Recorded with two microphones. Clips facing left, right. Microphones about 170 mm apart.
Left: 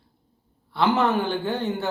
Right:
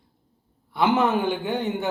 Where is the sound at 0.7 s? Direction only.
15° right (ahead or behind).